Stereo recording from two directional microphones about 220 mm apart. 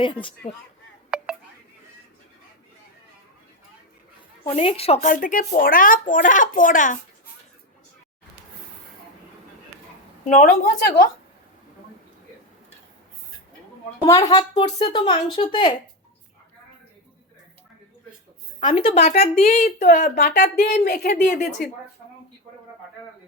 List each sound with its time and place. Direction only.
0.0 s speech: 25° left (ahead or behind)
1.1 s a sound: 5° right (ahead or behind)
4.4 s speech: 25° left (ahead or behind)
10.2 s speech: 35° left (ahead or behind)
14.0 s speech: 20° left (ahead or behind)
18.6 s speech: 25° left (ahead or behind); by 21.7 s 45° left (ahead or behind)